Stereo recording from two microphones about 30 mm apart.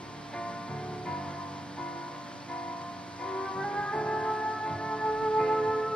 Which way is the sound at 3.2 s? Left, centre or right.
Left.